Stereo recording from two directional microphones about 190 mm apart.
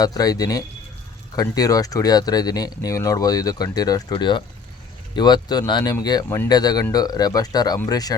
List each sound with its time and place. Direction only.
0.0 s speech: 20° left (ahead or behind)
6.2 s speech: 10° left (ahead or behind)
6.5 s speech: 20° left (ahead or behind)